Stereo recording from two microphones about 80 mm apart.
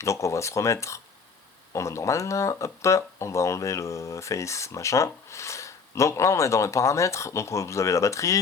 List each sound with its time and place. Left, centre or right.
0.0 s speech: left